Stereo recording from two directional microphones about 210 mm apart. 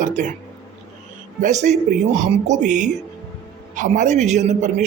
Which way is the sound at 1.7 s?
35° right (ahead or behind).